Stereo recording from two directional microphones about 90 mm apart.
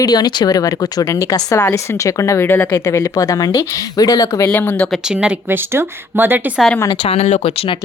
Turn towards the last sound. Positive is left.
turn(degrees=90)